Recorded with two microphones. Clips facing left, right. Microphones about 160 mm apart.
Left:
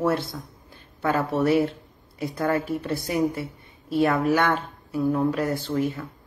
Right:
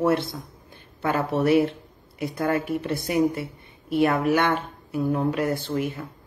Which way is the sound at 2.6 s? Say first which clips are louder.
Right 1 dB; 20° right (ahead or behind).